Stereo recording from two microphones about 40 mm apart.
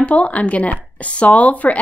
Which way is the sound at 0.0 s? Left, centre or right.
Left.